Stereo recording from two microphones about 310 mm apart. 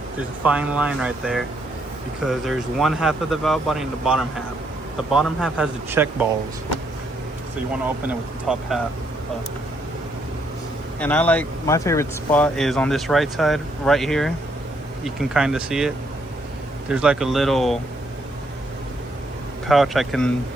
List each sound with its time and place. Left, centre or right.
0.4 s speech: centre
7.7 s speech: centre
11.0 s speech: centre
16.9 s speech: centre
19.6 s speech: centre